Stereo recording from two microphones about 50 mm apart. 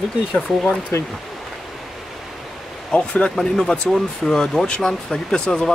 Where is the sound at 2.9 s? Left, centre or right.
Left.